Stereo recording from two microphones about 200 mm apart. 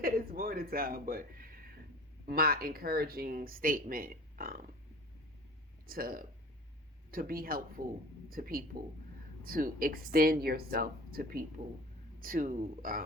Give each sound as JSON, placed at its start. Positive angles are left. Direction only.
{"t": 0.0, "sound": "a sound", "side_deg": -45}
{"t": 2.2, "sound": "speech", "side_deg": -50}
{"t": 5.8, "sound": "speech", "side_deg": -45}